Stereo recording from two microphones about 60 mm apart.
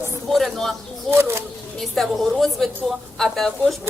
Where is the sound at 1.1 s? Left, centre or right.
Right.